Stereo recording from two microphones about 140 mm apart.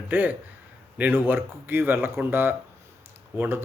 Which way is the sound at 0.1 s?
15° right (ahead or behind).